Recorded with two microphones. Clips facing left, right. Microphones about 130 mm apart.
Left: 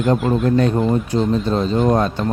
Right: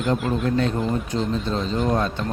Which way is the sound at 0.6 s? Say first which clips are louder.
Left 6 dB; 50° left (ahead or behind).